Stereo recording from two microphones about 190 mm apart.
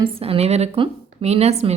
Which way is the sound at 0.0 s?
30° right (ahead or behind).